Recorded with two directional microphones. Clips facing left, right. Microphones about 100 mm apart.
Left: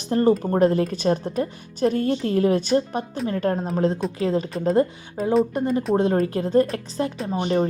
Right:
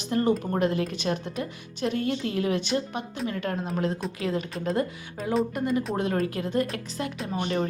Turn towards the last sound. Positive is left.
turn(degrees=30)  # may be behind; listen again after turning